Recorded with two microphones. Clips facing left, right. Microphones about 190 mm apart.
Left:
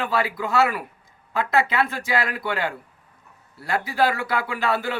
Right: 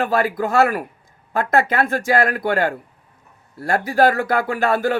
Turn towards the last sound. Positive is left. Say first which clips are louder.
# right 6 dB
turn(degrees=-50)  # may be behind; listen again after turning